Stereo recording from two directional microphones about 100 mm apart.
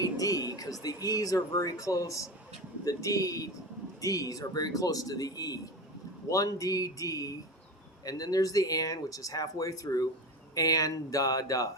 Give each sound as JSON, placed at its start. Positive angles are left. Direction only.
{"t": 0.0, "sound": "music", "side_deg": 35}
{"t": 0.8, "sound": "speech", "side_deg": 40}